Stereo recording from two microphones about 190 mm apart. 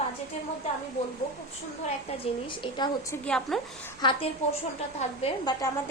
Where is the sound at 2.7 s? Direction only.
20° left (ahead or behind).